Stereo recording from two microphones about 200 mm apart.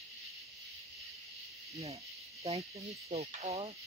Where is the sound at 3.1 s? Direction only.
30° right (ahead or behind).